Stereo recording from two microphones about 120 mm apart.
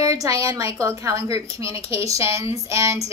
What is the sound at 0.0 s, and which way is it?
Speech, 25° right (ahead or behind).